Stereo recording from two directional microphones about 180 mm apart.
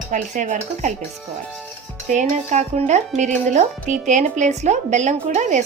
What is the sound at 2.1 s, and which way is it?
Speech, 40° right (ahead or behind).